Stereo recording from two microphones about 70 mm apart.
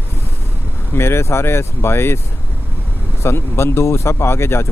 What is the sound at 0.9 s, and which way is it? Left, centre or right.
Speech, left.